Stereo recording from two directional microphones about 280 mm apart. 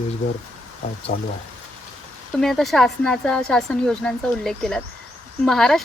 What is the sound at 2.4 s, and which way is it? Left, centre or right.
A woman's voice, centre.